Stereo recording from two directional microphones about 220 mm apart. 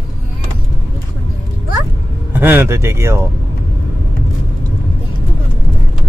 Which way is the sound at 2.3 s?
10° right (ahead or behind).